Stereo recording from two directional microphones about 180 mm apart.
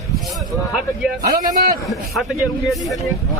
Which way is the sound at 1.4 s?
55° right (ahead or behind).